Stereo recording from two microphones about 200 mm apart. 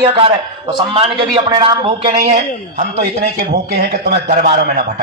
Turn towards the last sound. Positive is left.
turn(degrees=-50)  # may be behind; listen again after turning